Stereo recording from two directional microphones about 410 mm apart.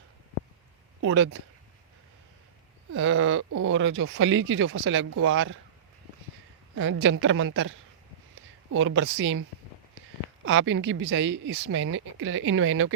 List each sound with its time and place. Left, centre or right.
1.0 s speech: right
2.9 s speech: right
6.7 s speech: right
8.8 s speech: right
10.4 s speech: right